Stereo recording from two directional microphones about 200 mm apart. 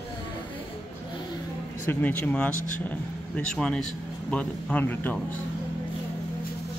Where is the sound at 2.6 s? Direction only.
40° left (ahead or behind).